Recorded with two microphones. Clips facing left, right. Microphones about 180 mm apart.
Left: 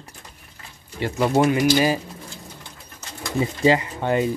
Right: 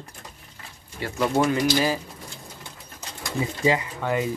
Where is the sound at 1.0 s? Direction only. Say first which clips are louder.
Left 3 dB; 25° left (ahead or behind).